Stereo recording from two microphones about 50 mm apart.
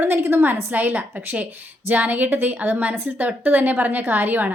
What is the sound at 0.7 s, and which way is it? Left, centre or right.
A woman's voice, right.